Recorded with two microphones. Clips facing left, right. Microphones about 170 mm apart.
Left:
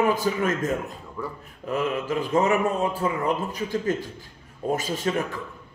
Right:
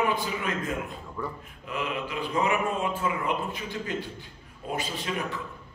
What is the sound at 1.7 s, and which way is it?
A man's voice, 40° left (ahead or behind).